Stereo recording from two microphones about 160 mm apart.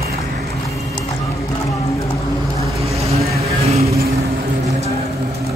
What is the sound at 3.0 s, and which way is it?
Vehicle, 40° right (ahead or behind).